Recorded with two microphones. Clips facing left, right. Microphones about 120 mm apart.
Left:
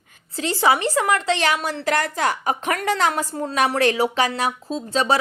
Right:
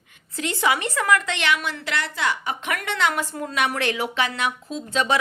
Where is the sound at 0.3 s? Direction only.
30° left (ahead or behind).